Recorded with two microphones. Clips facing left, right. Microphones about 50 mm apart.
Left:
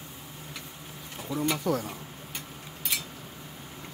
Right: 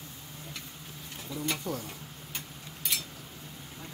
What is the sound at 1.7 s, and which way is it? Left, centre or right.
Speech, left.